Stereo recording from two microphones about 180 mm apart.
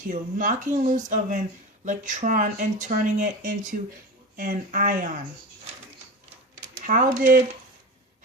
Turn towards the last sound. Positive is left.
turn(degrees=-50)  # may be behind; listen again after turning